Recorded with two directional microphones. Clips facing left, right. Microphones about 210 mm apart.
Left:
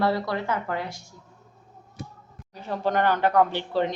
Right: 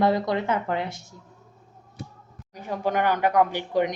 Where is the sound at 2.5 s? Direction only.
10° right (ahead or behind).